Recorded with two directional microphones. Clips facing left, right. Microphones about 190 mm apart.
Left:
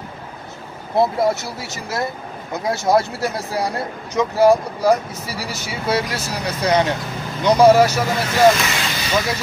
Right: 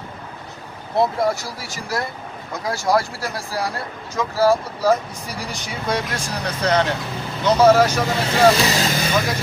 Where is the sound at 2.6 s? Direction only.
20° left (ahead or behind).